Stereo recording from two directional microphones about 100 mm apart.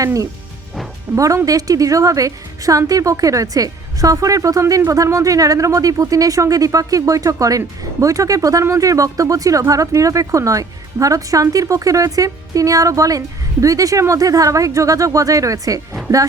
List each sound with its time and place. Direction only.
0.0 s speech: 35° right (ahead or behind)